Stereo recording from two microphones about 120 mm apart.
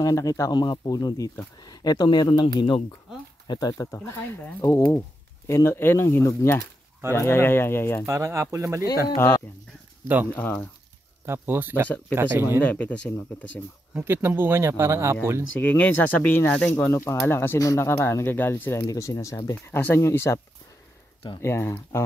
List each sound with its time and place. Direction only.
0.0 s speech: 30° left (ahead or behind); by 2.8 s 45° left (ahead or behind)
3.4 s speech: 30° left (ahead or behind)
8.1 s speech: 25° right (ahead or behind)
9.1 s speech: 20° left (ahead or behind)
10.0 s speech: 15° right (ahead or behind)
10.3 s speech: 15° left (ahead or behind)
11.2 s speech: 20° right (ahead or behind)
12.5 s speech: 10° left (ahead or behind)
13.9 s speech: 15° right (ahead or behind)
15.6 s speech: 15° left (ahead or behind)
21.4 s speech: 20° left (ahead or behind)